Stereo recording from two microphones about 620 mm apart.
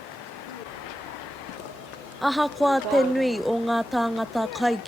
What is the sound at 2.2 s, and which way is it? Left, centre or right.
Speech, centre.